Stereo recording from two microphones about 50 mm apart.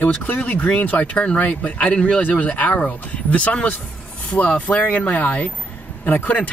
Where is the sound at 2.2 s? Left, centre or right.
Left.